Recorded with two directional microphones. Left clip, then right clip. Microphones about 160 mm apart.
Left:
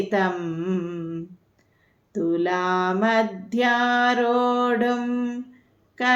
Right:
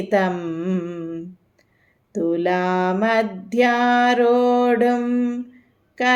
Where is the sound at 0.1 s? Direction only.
45° right (ahead or behind).